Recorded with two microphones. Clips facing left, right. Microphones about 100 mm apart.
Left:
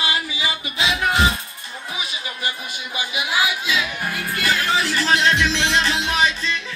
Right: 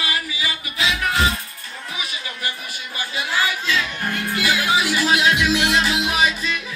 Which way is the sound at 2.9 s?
15° left (ahead or behind).